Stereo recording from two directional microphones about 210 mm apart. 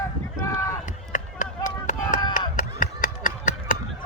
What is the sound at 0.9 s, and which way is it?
Run, 40° left (ahead or behind).